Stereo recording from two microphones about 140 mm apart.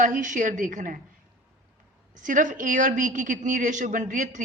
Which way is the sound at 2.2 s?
70° right (ahead or behind).